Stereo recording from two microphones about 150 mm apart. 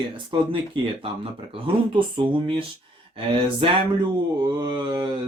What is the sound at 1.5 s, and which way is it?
Mantra, 35° right (ahead or behind).